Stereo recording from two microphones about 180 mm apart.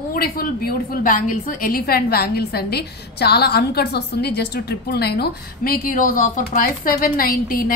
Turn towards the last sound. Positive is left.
turn(degrees=50)  # may be behind; listen again after turning